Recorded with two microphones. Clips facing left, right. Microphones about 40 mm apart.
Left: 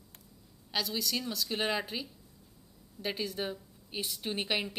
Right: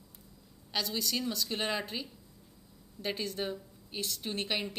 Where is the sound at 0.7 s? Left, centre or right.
Centre.